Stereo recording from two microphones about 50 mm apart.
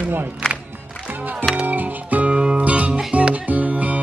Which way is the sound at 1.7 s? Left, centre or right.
Right.